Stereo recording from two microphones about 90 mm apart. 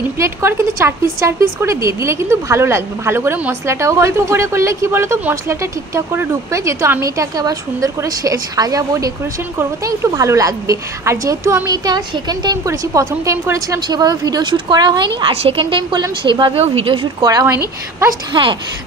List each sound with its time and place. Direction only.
0.2 s a woman's voice: 30° right (ahead or behind); by 12.0 s 45° right (ahead or behind)
12.6 s a woman's voice: 35° right (ahead or behind)
13.7 s a woman's voice: 50° right (ahead or behind); by 17.1 s 85° right
17.2 s speech: 45° right (ahead or behind)
18.3 s a woman's voice: 60° right (ahead or behind)